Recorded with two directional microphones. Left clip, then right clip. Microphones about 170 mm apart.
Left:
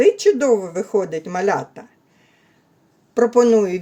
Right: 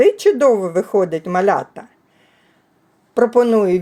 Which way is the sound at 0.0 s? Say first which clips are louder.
Right 3 dB; 20° right (ahead or behind).